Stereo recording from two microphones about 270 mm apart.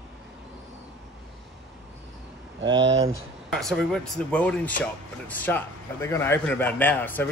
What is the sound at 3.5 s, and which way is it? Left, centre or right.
A man's voice, centre.